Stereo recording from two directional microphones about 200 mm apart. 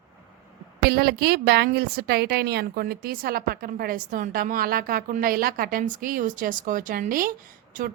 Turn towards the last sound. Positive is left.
turn(degrees=-45)  # may be behind; listen again after turning